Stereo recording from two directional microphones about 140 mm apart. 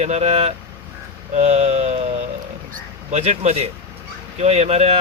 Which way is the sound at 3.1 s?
50° right (ahead or behind).